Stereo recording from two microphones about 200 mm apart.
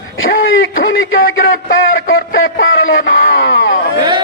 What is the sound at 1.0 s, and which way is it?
A man's voice, 75° left (ahead or behind).